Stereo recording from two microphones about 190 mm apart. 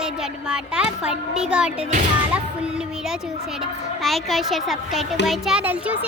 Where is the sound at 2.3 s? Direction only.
5° right (ahead or behind).